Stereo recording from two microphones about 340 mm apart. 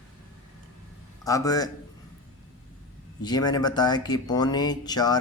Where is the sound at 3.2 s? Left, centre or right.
Centre.